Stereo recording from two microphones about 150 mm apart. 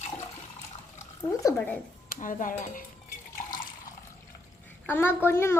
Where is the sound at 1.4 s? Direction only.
15° left (ahead or behind).